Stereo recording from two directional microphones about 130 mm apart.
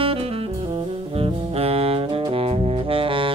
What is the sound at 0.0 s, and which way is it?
Saxophone, 45° right (ahead or behind).